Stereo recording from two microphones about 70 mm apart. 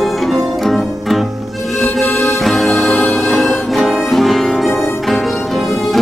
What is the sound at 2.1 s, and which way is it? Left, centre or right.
Music, left.